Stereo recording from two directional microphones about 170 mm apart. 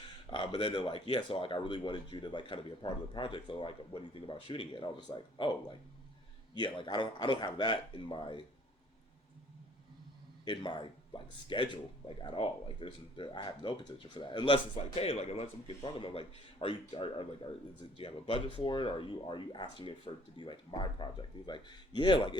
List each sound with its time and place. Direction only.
0.3 s speech: 30° left (ahead or behind)
10.4 s speech: 25° left (ahead or behind)